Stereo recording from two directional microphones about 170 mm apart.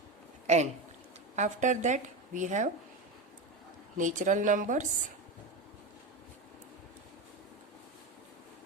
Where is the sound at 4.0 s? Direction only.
50° right (ahead or behind).